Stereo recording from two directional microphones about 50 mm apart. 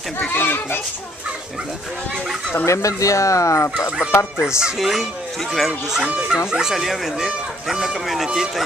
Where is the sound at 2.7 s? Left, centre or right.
Left.